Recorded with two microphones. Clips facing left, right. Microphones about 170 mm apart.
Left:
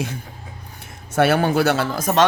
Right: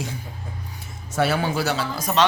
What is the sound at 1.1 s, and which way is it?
Speech, 60° left (ahead or behind).